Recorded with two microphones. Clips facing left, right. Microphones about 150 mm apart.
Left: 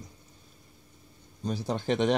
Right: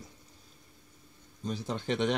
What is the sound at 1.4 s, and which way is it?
Speech, 35° left (ahead or behind).